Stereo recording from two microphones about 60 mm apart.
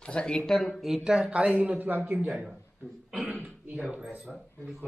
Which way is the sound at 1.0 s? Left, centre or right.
Centre.